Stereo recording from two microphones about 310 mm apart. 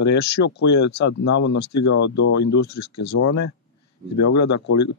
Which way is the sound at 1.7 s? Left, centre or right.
Left.